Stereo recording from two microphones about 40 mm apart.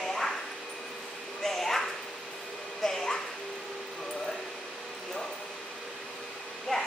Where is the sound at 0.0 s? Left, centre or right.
Centre.